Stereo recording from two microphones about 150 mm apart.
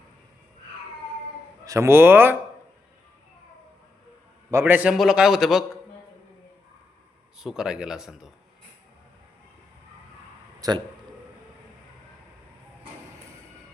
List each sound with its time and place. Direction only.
1.6 s speech: 20° right (ahead or behind)
4.5 s a man's voice: 15° right (ahead or behind)
7.3 s a man's voice: 5° right (ahead or behind)
10.6 s speech: 30° right (ahead or behind)